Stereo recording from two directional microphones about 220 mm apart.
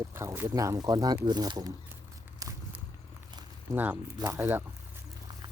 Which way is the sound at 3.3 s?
15° right (ahead or behind).